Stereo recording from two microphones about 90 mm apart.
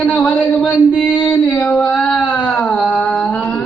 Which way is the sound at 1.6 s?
10° left (ahead or behind).